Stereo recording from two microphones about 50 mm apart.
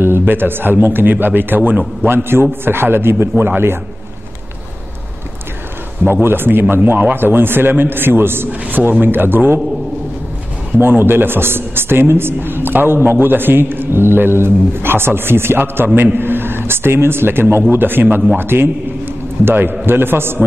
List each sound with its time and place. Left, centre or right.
0.0 s speech: right
2.0 s speech: right
6.2 s speech: right
8.5 s a man's voice: right
10.8 s speech: right
18.1 s a man's voice: right
18.4 s speech: right